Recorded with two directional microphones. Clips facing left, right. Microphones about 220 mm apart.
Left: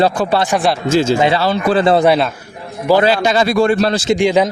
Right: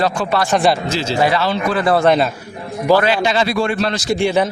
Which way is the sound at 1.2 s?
25° left (ahead or behind).